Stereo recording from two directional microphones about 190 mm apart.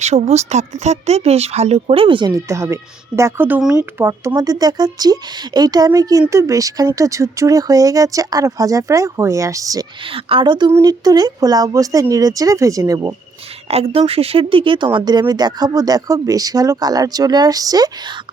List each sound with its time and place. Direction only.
0.0 s speech: 35° right (ahead or behind); by 9.8 s 15° right (ahead or behind)
10.1 s speech: 30° right (ahead or behind)
13.7 s speech: 30° right (ahead or behind)